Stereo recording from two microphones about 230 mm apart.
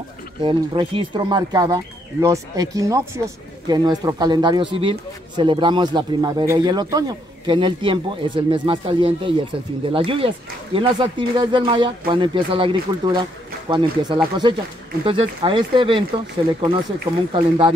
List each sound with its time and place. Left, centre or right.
0.4 s speech: right
17.3 s speech: right